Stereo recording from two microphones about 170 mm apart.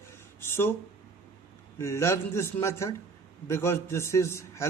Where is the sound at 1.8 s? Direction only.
15° left (ahead or behind).